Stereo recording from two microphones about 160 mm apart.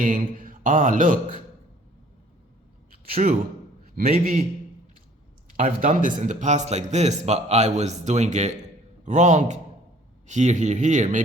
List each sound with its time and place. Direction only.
0.0 s mantra: 60° right (ahead or behind)
3.9 s a man's voice: 65° right (ahead or behind)
5.5 s a man's voice: 50° right (ahead or behind)